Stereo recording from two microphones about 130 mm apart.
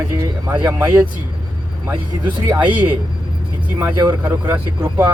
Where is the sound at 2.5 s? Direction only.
10° right (ahead or behind).